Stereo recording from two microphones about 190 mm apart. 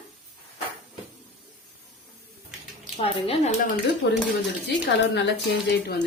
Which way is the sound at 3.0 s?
30° left (ahead or behind).